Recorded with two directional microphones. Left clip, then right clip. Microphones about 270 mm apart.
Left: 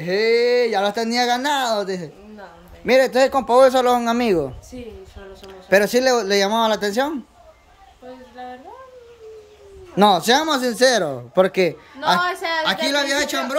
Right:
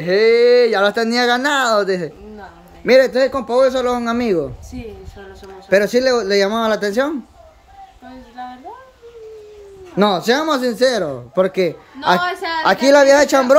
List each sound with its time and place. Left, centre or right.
0.0 s speech: centre
9.9 s speech: centre
12.2 s a woman's voice: left
12.6 s speech: centre